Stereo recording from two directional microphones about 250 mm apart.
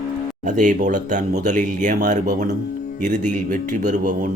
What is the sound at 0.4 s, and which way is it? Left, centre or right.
Speech, right.